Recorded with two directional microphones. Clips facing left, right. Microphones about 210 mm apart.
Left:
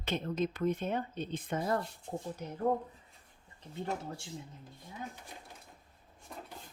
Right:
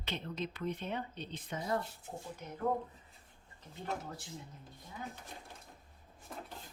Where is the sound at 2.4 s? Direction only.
40° left (ahead or behind).